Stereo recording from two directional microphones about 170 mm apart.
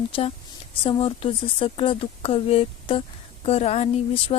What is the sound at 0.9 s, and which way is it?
A woman's voice, 30° left (ahead or behind).